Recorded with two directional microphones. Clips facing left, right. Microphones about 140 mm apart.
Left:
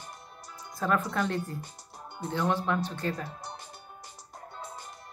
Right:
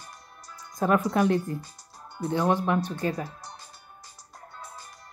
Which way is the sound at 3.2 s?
20° left (ahead or behind).